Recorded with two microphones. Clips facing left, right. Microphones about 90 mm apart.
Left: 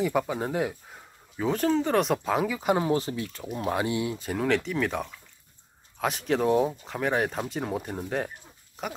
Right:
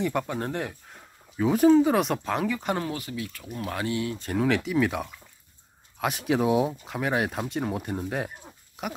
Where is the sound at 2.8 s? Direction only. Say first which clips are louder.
Left 6 dB; 30° left (ahead or behind).